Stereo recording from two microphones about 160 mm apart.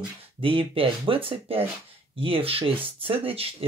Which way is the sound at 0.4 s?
35° right (ahead or behind).